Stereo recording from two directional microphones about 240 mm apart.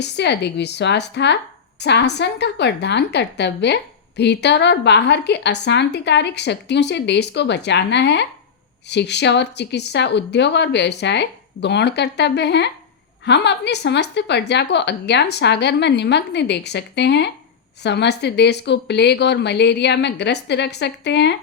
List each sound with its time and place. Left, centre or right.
0.0 s a woman's voice: left